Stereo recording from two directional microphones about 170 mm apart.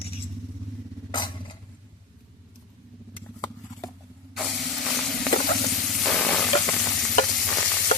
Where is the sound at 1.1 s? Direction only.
25° left (ahead or behind).